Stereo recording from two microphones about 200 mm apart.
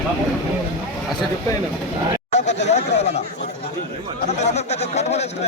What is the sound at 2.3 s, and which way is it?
Chatter, 35° left (ahead or behind).